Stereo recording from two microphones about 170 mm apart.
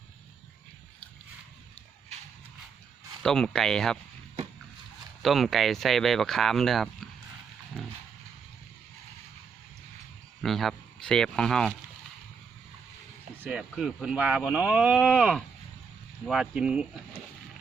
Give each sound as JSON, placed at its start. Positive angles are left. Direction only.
{"t": 3.2, "sound": "speech", "side_deg": 5}
{"t": 5.2, "sound": "speech", "side_deg": 0}
{"t": 7.8, "sound": "dog", "side_deg": 5}
{"t": 10.4, "sound": "speech", "side_deg": 0}
{"t": 13.4, "sound": "speech", "side_deg": -5}